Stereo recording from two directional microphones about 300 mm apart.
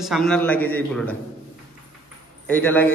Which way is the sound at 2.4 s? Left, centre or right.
Centre.